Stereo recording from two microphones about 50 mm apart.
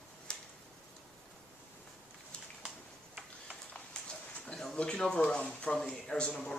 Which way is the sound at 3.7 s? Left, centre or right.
Centre.